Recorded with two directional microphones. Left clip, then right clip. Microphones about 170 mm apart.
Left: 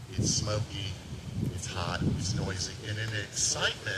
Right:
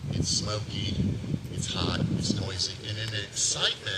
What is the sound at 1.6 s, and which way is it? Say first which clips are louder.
Speech: right 3 dB; 40° left (ahead or behind).